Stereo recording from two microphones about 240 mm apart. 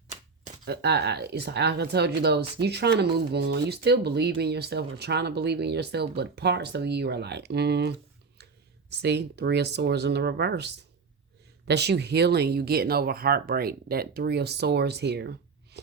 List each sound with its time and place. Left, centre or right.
0.1 s typewriter: right
0.7 s speech: right
11.7 s speech: right